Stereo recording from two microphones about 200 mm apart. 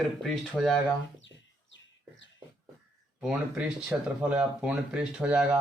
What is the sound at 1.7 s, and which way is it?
Bird, 65° left (ahead or behind).